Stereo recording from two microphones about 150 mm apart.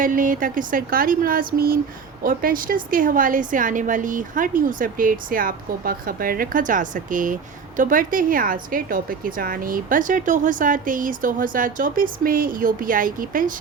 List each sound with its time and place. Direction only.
0.0 s a woman's voice: 65° right (ahead or behind)